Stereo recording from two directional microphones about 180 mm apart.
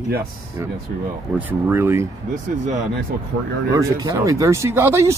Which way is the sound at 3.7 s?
20° right (ahead or behind).